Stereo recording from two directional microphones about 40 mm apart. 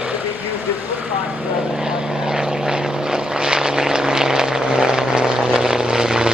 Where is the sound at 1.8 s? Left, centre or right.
Centre.